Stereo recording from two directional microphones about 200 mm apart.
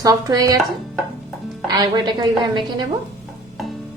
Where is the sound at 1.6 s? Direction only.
20° right (ahead or behind).